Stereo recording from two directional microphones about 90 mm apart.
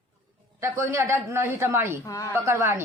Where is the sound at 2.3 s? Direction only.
35° right (ahead or behind).